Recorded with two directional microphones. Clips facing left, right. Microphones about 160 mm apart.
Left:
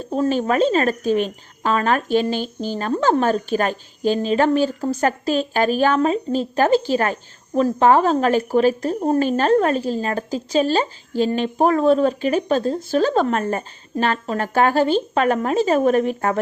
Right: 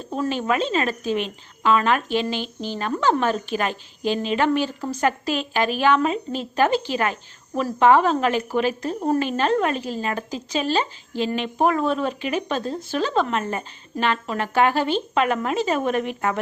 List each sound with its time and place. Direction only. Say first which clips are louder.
0.2 s speech: left 5 dB; 40° left (ahead or behind)